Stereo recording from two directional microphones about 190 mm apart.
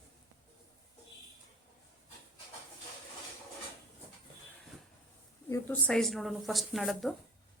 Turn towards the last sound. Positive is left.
turn(degrees=0)  # may be behind; listen again after turning